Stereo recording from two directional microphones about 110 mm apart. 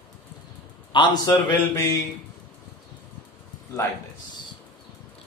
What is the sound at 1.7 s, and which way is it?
Speech, 25° left (ahead or behind).